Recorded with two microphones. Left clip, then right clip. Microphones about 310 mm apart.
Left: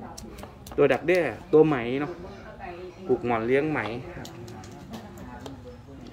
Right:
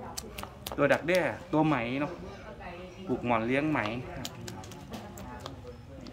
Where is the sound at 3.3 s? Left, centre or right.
Centre.